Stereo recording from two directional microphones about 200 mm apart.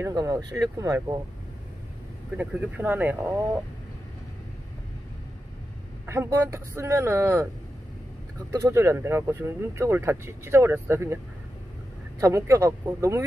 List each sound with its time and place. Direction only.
0.0 s speech: 15° right (ahead or behind)
2.3 s speech: 10° right (ahead or behind)
6.0 s speech: 15° right (ahead or behind)
8.5 s speech: 15° right (ahead or behind)
12.2 s speech: 15° right (ahead or behind)